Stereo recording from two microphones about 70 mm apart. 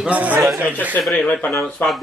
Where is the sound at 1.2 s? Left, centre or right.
Centre.